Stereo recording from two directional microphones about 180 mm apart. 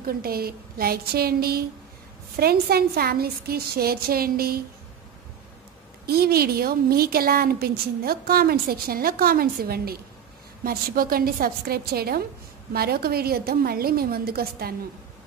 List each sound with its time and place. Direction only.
0.0 s a woman's voice: 55° right (ahead or behind)
6.0 s a woman's voice: 60° right (ahead or behind)